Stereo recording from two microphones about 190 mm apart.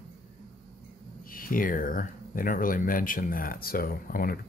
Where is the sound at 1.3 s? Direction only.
50° left (ahead or behind).